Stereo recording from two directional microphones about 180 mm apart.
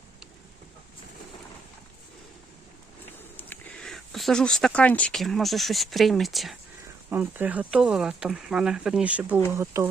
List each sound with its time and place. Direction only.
3.3 s speech: 5° left (ahead or behind); by 9.9 s 15° right (ahead or behind)